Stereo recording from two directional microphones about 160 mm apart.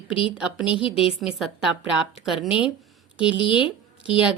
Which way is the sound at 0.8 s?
35° left (ahead or behind).